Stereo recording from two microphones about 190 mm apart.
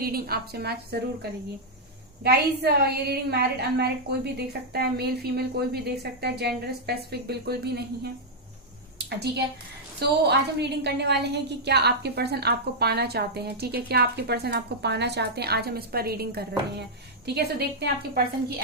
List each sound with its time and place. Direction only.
0.0 s a woman's voice: 55° right (ahead or behind)
9.0 s a sound: 60° right (ahead or behind)
10.0 s a woman's voice: 60° right (ahead or behind)